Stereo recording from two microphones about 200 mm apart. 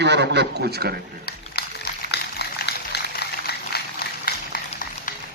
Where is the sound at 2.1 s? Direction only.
55° left (ahead or behind).